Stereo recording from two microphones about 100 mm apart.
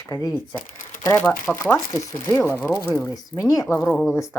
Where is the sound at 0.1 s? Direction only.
35° left (ahead or behind).